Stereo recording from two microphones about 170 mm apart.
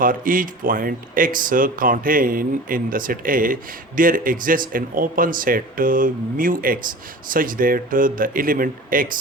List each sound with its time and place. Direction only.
0.0 s speech: 55° right (ahead or behind)